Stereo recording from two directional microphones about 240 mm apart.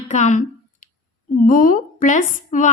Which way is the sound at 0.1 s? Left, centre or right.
Left.